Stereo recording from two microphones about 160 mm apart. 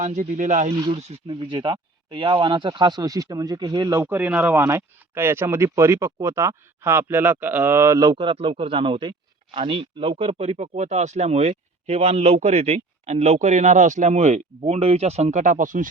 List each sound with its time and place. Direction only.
0.0 s speech: 50° right (ahead or behind); by 4.0 s 25° right (ahead or behind)
4.0 s speech: 10° right (ahead or behind)
8.1 s speech: 30° right (ahead or behind); by 15.9 s 55° right (ahead or behind)